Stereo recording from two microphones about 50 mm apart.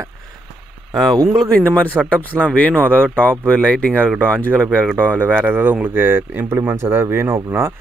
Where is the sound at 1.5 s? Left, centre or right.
Left.